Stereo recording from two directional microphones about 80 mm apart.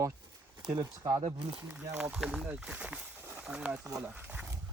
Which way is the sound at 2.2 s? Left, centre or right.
Centre.